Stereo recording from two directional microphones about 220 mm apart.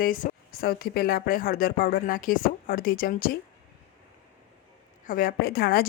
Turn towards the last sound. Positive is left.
turn(degrees=45)  # may be behind; listen again after turning